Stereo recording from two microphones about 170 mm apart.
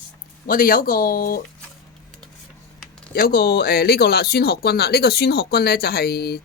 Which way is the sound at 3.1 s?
60° left (ahead or behind).